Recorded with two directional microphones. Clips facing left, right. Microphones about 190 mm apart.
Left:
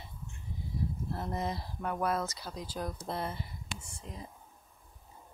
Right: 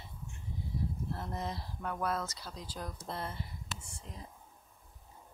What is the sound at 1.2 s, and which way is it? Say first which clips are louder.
Speech: left 4 dB; 10° left (ahead or behind).